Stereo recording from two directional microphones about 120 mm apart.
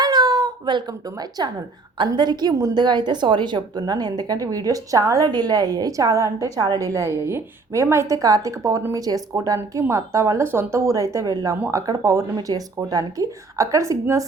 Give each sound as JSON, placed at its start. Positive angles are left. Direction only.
{"t": 0.0, "sound": "cat", "side_deg": -35}
{"t": 2.1, "sound": "a woman's voice", "side_deg": -35}